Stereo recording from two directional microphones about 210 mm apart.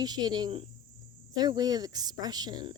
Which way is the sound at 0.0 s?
20° right (ahead or behind).